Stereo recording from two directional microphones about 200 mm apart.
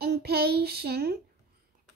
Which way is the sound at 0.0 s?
55° right (ahead or behind).